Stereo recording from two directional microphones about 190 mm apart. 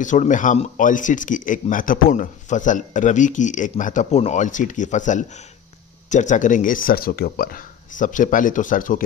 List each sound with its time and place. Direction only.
0.0 s speech: 40° left (ahead or behind)